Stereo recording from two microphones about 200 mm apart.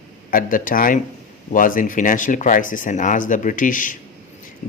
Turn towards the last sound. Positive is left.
turn(degrees=40)  # may be behind; listen again after turning